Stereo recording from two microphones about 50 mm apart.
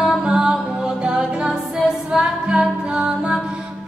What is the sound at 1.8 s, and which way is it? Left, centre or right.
Music, centre.